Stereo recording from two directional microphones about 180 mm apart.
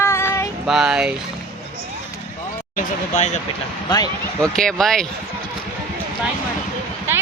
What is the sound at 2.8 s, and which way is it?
Speech, 40° left (ahead or behind).